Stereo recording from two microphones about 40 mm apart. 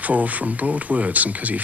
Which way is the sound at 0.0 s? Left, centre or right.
Right.